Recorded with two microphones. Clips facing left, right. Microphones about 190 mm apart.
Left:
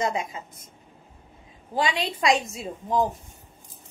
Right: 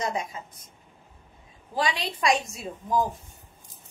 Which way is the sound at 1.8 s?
25° left (ahead or behind).